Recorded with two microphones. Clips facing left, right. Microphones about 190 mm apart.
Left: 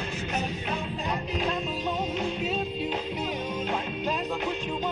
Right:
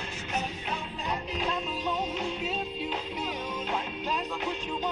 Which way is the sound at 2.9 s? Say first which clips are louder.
Left 3 dB; 50° left (ahead or behind).